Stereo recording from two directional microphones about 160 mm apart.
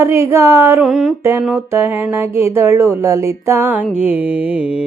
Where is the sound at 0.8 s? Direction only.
5° right (ahead or behind).